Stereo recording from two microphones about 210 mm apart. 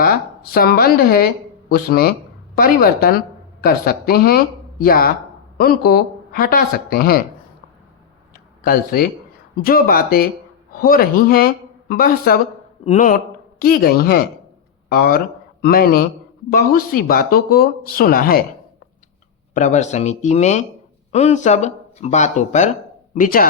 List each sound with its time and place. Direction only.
0.0 s a woman's voice: 45° left (ahead or behind)
8.6 s speech: 45° left (ahead or behind)
19.5 s speech: 35° left (ahead or behind)